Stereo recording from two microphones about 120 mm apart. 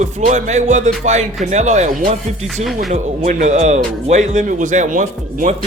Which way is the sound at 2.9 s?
85° right.